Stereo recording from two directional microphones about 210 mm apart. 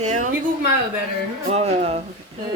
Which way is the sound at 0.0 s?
35° right (ahead or behind).